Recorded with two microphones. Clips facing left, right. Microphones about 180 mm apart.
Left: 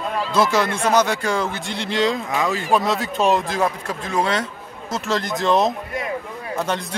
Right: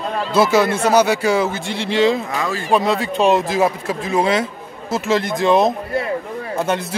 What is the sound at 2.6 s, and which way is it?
Speech, centre (ahead or behind).